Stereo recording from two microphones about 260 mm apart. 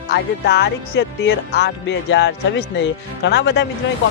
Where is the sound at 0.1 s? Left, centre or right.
Left.